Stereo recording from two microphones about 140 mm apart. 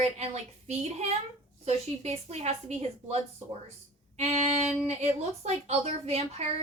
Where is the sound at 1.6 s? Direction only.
50° right (ahead or behind).